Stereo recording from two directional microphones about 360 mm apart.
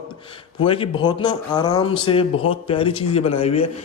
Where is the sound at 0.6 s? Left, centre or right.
Centre.